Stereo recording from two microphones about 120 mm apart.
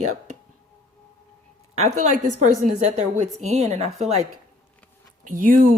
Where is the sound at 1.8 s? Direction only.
90° right; by 3.9 s 70° right (ahead or behind).